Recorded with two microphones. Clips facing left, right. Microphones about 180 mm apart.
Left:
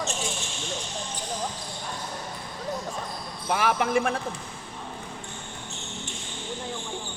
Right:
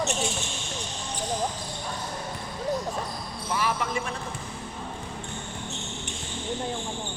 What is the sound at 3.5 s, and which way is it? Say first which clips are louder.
Speech: left 5 dB; 65° left (ahead or behind).